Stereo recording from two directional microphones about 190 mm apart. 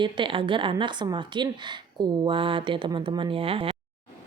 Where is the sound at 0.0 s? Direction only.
25° right (ahead or behind).